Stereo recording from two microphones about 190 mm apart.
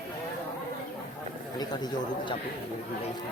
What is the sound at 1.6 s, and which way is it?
Speech, 20° left (ahead or behind).